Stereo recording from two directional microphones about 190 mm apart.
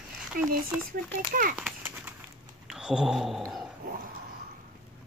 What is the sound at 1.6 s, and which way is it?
Horse, 5° right (ahead or behind).